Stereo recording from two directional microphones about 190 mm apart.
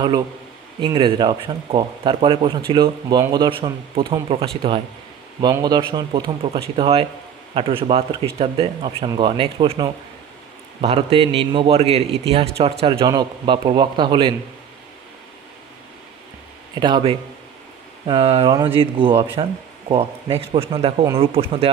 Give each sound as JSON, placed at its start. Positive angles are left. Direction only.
{"t": 0.7, "sound": "a man's voice", "side_deg": -25}
{"t": 16.8, "sound": "a man's voice", "side_deg": -25}